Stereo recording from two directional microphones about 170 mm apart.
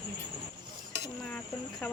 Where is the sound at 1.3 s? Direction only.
5° left (ahead or behind).